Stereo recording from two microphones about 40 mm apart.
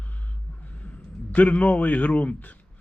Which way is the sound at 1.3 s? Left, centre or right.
Left.